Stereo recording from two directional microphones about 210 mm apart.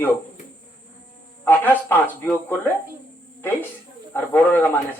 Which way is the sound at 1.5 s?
10° left (ahead or behind).